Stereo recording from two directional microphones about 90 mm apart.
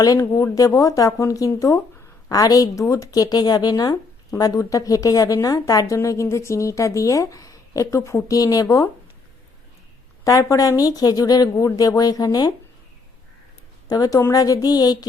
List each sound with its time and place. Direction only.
0.0 s speech: 40° left (ahead or behind)
10.2 s speech: 40° left (ahead or behind)
13.9 s speech: 40° left (ahead or behind)